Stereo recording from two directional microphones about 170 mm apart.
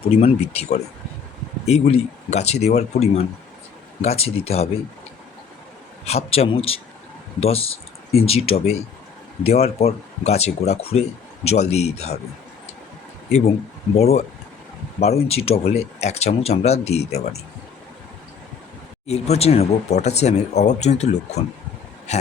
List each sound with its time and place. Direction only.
0.2 s speech: 40° left (ahead or behind)
6.1 s speech: 35° left (ahead or behind)
13.9 s speech: 40° left (ahead or behind)
19.0 s speech: 40° left (ahead or behind)